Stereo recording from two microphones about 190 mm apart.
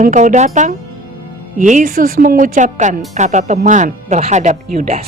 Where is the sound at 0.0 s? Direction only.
40° right (ahead or behind).